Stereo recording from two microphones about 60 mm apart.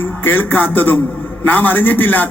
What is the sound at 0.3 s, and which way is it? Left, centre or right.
A man's voice, left.